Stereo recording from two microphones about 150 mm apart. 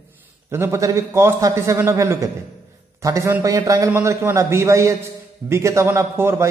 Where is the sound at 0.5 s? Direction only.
15° right (ahead or behind).